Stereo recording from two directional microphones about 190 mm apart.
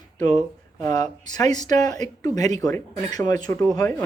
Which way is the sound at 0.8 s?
15° left (ahead or behind).